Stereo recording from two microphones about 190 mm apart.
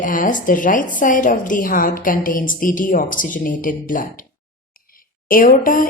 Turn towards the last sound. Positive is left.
turn(degrees=45)  # may be behind; listen again after turning